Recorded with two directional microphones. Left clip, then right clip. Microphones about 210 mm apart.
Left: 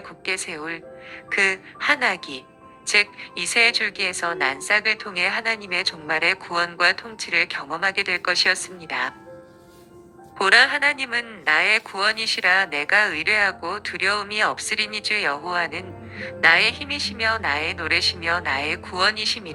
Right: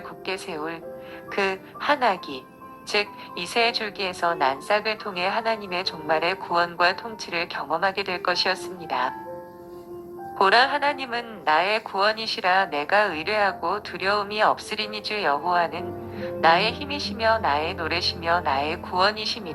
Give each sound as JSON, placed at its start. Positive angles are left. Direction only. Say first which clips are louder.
{"t": 0.3, "sound": "a woman's voice", "louder": "left 3 dB", "side_deg": 15}
{"t": 10.3, "sound": "a woman's voice", "louder": "left 2 dB", "side_deg": 15}